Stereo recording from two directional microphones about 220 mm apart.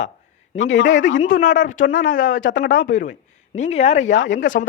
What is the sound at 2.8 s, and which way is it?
Speech, 35° left (ahead or behind).